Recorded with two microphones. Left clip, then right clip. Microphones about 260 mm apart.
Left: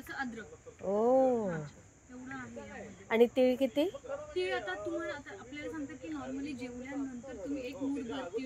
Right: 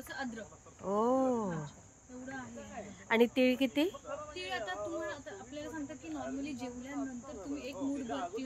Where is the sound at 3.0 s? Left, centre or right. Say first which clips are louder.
Left 2 dB; centre.